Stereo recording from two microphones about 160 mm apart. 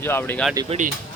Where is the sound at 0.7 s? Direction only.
50° right (ahead or behind).